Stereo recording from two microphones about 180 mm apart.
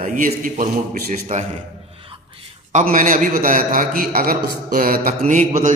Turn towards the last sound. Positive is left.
turn(degrees=-45)  # may be behind; listen again after turning